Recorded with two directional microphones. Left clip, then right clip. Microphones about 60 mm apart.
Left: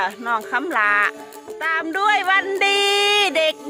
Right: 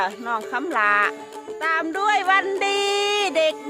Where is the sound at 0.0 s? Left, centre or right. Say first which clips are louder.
Left 2 dB; centre.